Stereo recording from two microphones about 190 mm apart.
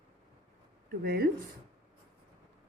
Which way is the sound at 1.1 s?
50° right (ahead or behind).